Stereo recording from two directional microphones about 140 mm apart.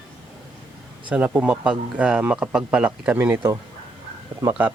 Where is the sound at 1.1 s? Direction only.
10° right (ahead or behind).